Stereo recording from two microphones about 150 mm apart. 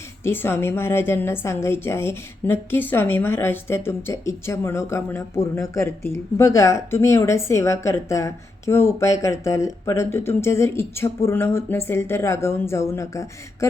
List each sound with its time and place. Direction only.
0.3 s a woman's voice: 15° left (ahead or behind)